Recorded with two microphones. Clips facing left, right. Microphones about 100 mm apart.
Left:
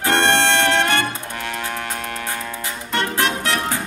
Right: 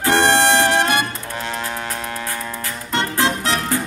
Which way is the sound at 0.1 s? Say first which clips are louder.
Right 2 dB; 15° right (ahead or behind).